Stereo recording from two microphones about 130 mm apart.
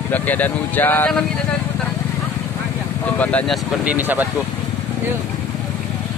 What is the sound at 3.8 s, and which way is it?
Speech, 10° right (ahead or behind).